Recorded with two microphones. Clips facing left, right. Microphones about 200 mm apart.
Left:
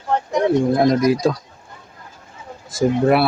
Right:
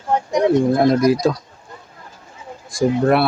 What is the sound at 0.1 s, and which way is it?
Speech, 15° right (ahead or behind).